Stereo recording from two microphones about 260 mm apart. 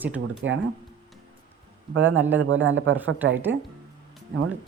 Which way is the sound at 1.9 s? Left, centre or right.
Right.